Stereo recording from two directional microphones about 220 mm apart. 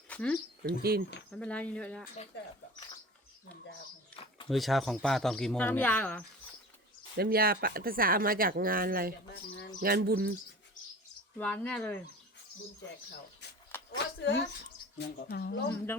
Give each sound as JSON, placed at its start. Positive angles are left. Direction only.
{"t": 0.1, "sound": "a sound", "side_deg": 5}
{"t": 0.6, "sound": "bird", "side_deg": -45}
{"t": 1.3, "sound": "speech", "side_deg": 5}
{"t": 4.1, "sound": "a sound", "side_deg": 25}
{"t": 4.4, "sound": "speech", "side_deg": 0}
{"t": 7.2, "sound": "speech", "side_deg": -45}
{"t": 9.8, "sound": "bird", "side_deg": -45}
{"t": 11.3, "sound": "speech", "side_deg": 5}
{"t": 13.4, "sound": "a sound", "side_deg": 50}
{"t": 13.9, "sound": "speech", "side_deg": 55}